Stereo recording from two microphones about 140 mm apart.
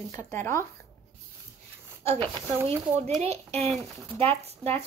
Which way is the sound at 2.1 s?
40° right (ahead or behind).